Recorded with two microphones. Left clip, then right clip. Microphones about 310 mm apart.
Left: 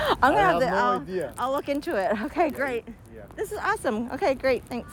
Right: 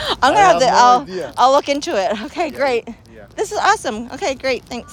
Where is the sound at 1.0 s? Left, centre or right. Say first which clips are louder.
Right 4 dB; right.